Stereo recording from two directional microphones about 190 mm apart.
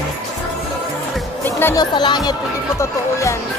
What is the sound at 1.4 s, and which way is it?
Speech, 10° left (ahead or behind).